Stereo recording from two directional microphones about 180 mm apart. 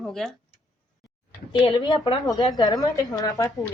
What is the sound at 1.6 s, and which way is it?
A woman's voice, 25° left (ahead or behind).